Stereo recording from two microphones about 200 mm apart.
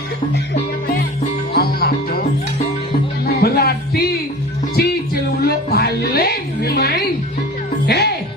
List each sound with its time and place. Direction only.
1.5 s music: 50° left (ahead or behind)
3.4 s a sound: 50° left (ahead or behind)
5.4 s music: 50° left (ahead or behind)